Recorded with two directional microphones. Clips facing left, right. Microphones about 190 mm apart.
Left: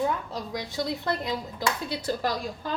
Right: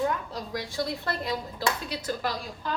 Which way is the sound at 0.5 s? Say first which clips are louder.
Even; 20° left (ahead or behind).